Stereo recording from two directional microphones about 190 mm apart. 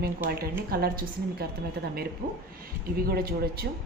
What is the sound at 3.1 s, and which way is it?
Music, 55° right (ahead or behind).